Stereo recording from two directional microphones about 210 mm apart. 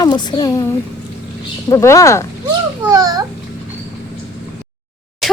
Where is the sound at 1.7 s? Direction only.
15° left (ahead or behind).